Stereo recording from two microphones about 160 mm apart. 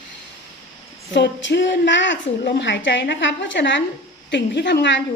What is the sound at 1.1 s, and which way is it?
A woman's voice, 90° left.